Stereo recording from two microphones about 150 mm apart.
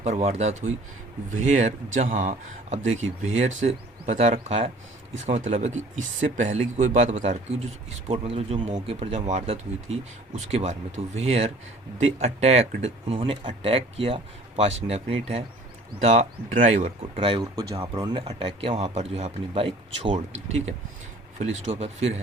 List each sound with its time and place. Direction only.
0.0 s speech: 45° right (ahead or behind)
17.2 s speech: 35° right (ahead or behind)
17.4 s speech: 25° right (ahead or behind)
18.3 s speech: 40° right (ahead or behind)